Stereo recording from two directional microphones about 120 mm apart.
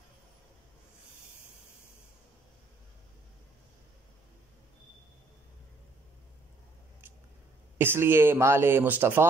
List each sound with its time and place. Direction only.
7.7 s speech: 20° right (ahead or behind)